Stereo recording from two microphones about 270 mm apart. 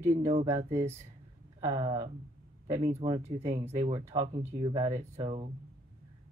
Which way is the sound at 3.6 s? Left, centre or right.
Centre.